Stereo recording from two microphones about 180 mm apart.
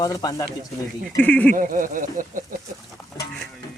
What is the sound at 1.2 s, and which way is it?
Speech, 10° left (ahead or behind).